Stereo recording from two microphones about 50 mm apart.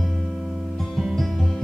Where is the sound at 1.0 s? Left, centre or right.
Centre.